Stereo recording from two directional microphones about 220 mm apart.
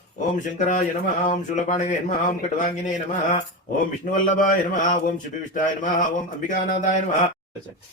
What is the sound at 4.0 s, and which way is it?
Speech, 35° left (ahead or behind).